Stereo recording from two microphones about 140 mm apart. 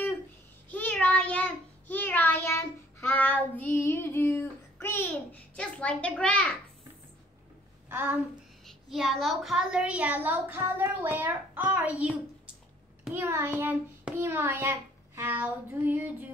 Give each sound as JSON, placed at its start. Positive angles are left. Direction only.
{"t": 0.7, "sound": "child singing", "side_deg": 10}
{"t": 7.9, "sound": "a sound", "side_deg": -15}
{"t": 8.6, "sound": "a woman's voice", "side_deg": 0}
{"t": 13.1, "sound": "a woman's voice", "side_deg": -20}